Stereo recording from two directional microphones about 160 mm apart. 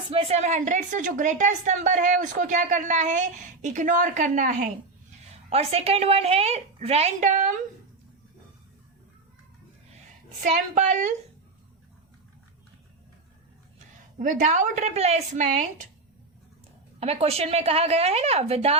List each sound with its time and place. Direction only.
0.1 s a woman's voice: 40° right (ahead or behind); by 4.7 s 55° right (ahead or behind)
5.3 s a woman's voice: 40° right (ahead or behind)
10.4 s a woman's voice: 50° right (ahead or behind)
13.7 s a woman's voice: 50° right (ahead or behind)
17.0 s a woman's voice: 40° right (ahead or behind)